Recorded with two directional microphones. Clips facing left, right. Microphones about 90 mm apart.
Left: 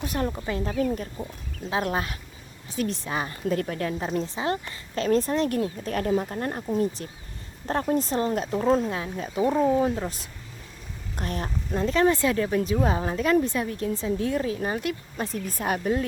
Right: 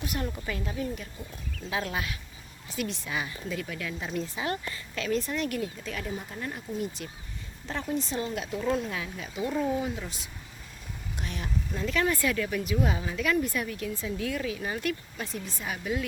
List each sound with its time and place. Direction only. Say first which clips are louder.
0.0 s speech: left 5 dB; 35° left (ahead or behind)
0.7 s speech: left 9 dB; 65° left (ahead or behind)
0.9 s speech: left 7 dB; 40° left (ahead or behind)
5.0 s speech: left 7 dB; 40° left (ahead or behind); by 6.2 s 60° left (ahead or behind)
6.3 s speech: left 8 dB; 50° left (ahead or behind)
6.8 s speech: left 7 dB; 35° left (ahead or behind)
11.2 s speech: left 5 dB; 40° left (ahead or behind)
15.8 s speech: left 4 dB; 40° left (ahead or behind)